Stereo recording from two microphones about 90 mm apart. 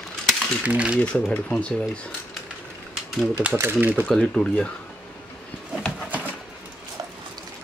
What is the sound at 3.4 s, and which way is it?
Speech, 20° right (ahead or behind).